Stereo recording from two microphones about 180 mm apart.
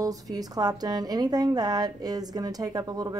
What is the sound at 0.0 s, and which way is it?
A woman's voice, 20° right (ahead or behind).